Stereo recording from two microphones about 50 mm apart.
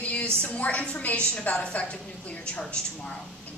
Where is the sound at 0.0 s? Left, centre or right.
Left.